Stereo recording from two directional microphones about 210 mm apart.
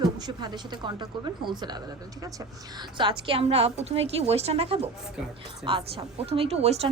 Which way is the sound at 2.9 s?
25° right (ahead or behind).